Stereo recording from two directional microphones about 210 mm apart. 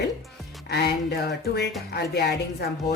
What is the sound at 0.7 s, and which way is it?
Speech, 50° left (ahead or behind).